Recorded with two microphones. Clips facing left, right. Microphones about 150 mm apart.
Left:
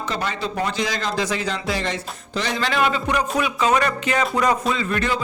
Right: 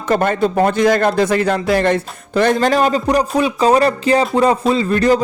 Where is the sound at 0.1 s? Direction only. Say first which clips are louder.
Right 13 dB; 50° right (ahead or behind).